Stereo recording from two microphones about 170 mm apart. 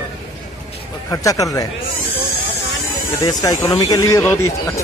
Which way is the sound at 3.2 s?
20° left (ahead or behind).